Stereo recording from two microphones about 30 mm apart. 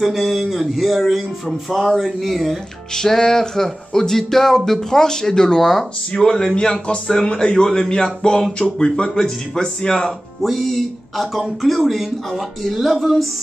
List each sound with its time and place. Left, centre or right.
0.0 s speech: centre
2.9 s music: centre
6.1 s a sound: left
10.4 s speech: centre
12.3 s music: centre
12.7 s speech: centre